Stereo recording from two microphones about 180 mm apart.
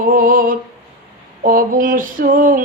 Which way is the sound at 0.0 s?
50° right (ahead or behind).